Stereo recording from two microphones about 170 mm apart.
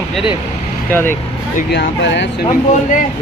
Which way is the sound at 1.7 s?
90° left.